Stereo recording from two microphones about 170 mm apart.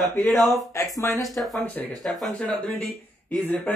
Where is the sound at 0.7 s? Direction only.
20° left (ahead or behind).